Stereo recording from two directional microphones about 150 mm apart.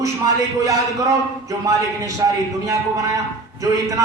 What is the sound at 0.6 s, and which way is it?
A man's voice, 20° right (ahead or behind).